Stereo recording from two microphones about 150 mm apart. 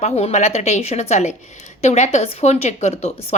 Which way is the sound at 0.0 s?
45° left (ahead or behind).